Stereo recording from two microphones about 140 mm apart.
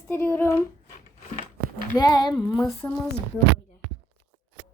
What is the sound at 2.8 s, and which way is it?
Speech, 10° left (ahead or behind).